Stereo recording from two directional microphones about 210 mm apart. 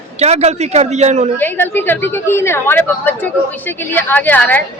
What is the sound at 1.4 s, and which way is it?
A woman's voice, 10° left (ahead or behind).